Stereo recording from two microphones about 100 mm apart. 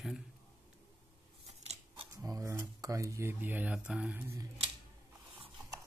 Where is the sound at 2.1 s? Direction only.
35° right (ahead or behind); by 4.3 s 20° right (ahead or behind).